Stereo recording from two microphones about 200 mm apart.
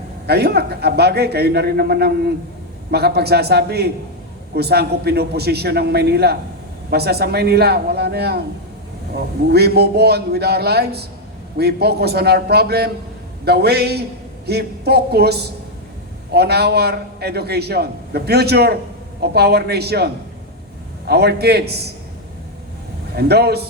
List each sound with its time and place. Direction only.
0.3 s a man's voice: 55° right (ahead or behind)
21.1 s a man's voice: 55° right (ahead or behind)
23.1 s a man's voice: 55° right (ahead or behind)